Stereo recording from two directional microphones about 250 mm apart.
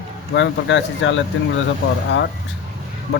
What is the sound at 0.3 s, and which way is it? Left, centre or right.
Speech, left.